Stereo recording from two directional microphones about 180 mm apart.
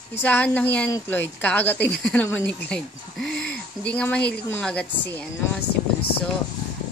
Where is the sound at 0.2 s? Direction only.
10° left (ahead or behind).